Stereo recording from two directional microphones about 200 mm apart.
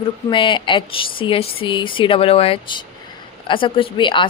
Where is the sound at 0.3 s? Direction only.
25° left (ahead or behind).